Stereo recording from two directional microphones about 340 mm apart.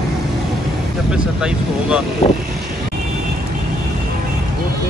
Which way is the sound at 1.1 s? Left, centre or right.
Centre.